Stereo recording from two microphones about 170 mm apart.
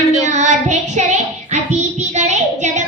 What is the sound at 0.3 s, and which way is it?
Child singing, 45° right (ahead or behind).